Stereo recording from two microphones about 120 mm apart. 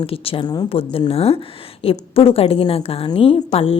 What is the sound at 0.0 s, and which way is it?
A woman's voice, 50° left (ahead or behind).